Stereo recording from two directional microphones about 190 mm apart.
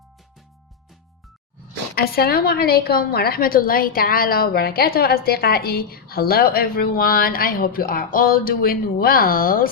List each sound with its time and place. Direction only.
2.0 s a woman's voice: 55° left (ahead or behind)